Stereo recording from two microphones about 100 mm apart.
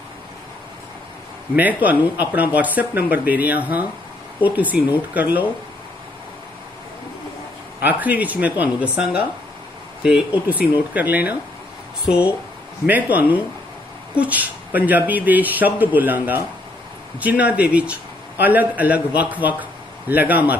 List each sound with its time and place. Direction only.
1.6 s speech: 15° right (ahead or behind)
7.8 s speech: 15° right (ahead or behind)
10.3 s speech: 15° right (ahead or behind)